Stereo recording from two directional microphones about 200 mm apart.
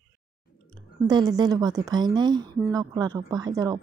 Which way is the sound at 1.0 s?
20° right (ahead or behind).